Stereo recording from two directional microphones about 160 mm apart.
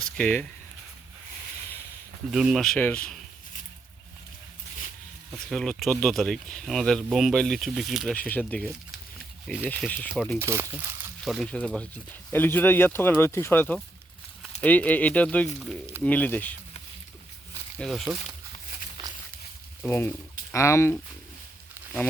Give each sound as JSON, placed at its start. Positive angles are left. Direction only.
{"t": 0.2, "sound": "speech", "side_deg": 10}
{"t": 2.3, "sound": "speech", "side_deg": -5}
{"t": 5.5, "sound": "speech", "side_deg": 0}
{"t": 10.4, "sound": "speech", "side_deg": -15}
{"t": 11.3, "sound": "speech", "side_deg": 0}
{"t": 17.7, "sound": "speech", "side_deg": 0}
{"t": 19.8, "sound": "speech", "side_deg": 15}